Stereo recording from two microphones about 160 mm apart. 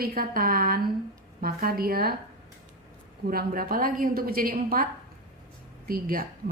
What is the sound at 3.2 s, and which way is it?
A woman's voice, 70° right (ahead or behind).